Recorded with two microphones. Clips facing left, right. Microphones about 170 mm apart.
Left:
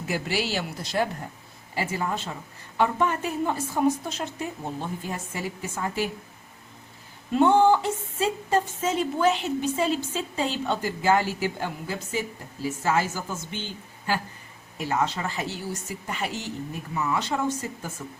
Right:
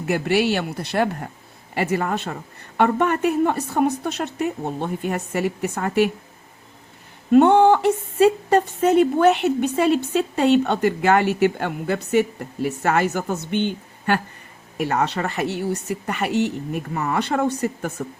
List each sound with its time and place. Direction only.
0.0 s a woman's voice: 60° right (ahead or behind)
7.3 s a woman's voice: 60° right (ahead or behind)